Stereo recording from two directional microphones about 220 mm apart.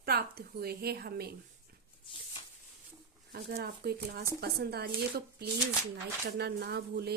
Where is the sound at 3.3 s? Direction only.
45° right (ahead or behind).